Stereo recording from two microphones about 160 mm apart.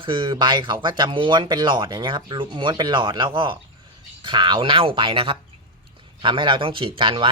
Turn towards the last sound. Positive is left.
turn(degrees=-35)  # may be behind; listen again after turning